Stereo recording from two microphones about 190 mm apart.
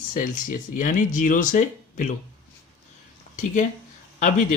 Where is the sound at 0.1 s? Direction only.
45° left (ahead or behind).